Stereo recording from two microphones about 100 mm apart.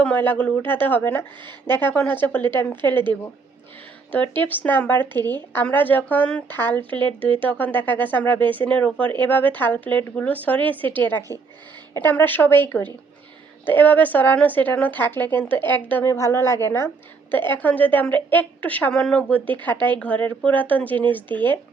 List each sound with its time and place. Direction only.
0.0 s a woman's voice: 15° left (ahead or behind)
1.5 s speech: 45° right (ahead or behind)
1.8 s speech: 20° left (ahead or behind)
4.1 s a woman's voice: 15° left (ahead or behind)